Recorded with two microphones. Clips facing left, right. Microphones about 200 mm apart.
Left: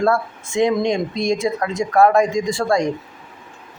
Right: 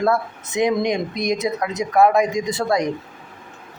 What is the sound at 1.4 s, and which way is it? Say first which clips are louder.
Speech: left 2 dB; 20° right (ahead or behind).